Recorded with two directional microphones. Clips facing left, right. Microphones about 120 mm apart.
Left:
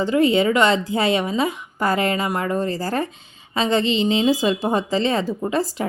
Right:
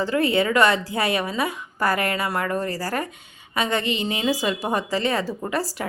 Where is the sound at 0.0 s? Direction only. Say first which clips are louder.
Left 4 dB; 20° left (ahead or behind).